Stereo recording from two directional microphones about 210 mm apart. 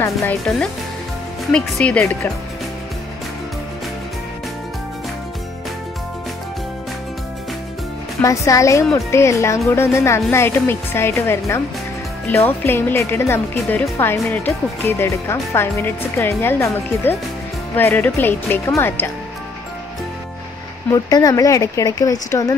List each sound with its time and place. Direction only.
0.0 s speech: 5° left (ahead or behind)
8.2 s speech: 15° left (ahead or behind)
20.9 s speech: 15° left (ahead or behind)